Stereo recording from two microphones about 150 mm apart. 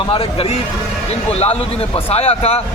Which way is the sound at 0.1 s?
40° left (ahead or behind).